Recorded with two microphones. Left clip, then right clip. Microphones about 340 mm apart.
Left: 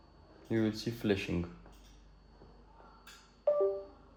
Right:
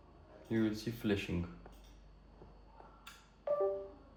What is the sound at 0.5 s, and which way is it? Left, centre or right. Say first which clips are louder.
Speech: left 3 dB; left.